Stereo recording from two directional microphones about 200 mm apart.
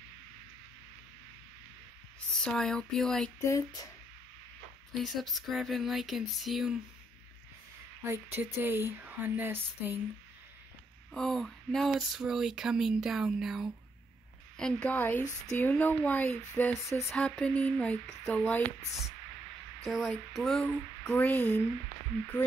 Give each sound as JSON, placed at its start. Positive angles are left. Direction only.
{"t": 2.4, "sound": "speech", "side_deg": 5}
{"t": 3.4, "sound": "speech", "side_deg": 15}
{"t": 4.9, "sound": "speech", "side_deg": 0}
{"t": 8.0, "sound": "speech", "side_deg": -10}
{"t": 11.1, "sound": "speech", "side_deg": 0}
{"t": 19.8, "sound": "speech", "side_deg": 0}